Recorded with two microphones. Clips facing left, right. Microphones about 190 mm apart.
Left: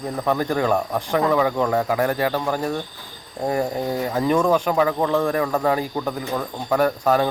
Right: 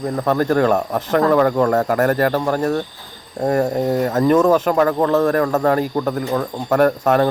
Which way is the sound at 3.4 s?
50° right (ahead or behind).